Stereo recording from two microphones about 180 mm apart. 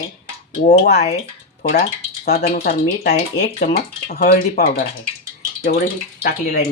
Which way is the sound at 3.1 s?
40° left (ahead or behind).